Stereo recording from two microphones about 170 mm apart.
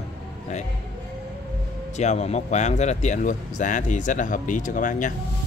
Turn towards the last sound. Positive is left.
turn(degrees=50)  # may be behind; listen again after turning